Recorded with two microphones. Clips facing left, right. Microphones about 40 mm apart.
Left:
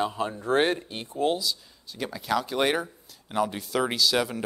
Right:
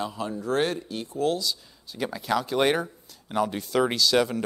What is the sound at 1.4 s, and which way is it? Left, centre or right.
Speech, centre.